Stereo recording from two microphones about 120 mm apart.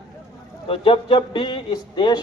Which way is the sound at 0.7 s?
50° left (ahead or behind).